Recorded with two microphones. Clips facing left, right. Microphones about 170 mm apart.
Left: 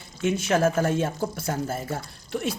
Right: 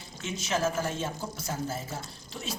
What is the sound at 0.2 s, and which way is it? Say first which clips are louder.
Speech: left 8 dB; 55° left (ahead or behind).